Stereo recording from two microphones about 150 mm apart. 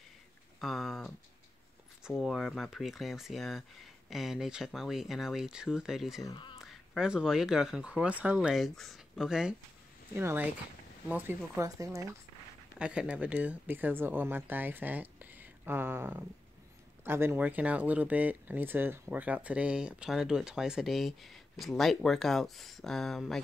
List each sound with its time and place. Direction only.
0.6 s speech: centre (ahead or behind)
6.3 s a sound: 35° left (ahead or behind)
6.6 s speech: 5° right (ahead or behind); by 12.2 s 20° right (ahead or behind)
12.7 s speech: 5° right (ahead or behind)